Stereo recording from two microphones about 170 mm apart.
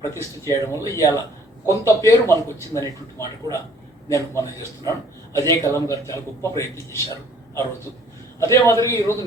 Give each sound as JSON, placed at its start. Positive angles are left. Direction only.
{"t": 0.0, "sound": "a man's voice", "side_deg": 15}